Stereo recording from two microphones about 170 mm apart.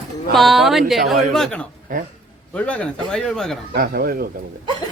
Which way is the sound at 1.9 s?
50° right (ahead or behind).